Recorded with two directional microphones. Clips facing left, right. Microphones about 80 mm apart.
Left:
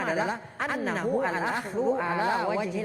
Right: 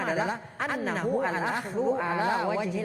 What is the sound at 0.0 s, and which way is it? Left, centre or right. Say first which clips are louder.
A woman's voice: even; left.